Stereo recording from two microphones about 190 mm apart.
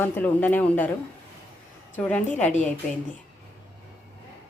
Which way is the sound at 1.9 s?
5° left (ahead or behind).